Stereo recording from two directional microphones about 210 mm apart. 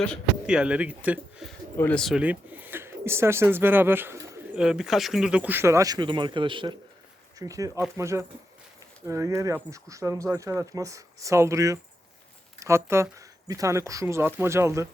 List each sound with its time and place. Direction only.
0.0 s speech: centre (ahead or behind)
1.7 s speech: 10° left (ahead or behind); by 4.4 s 15° right (ahead or behind)
4.5 s speech: 5° right (ahead or behind)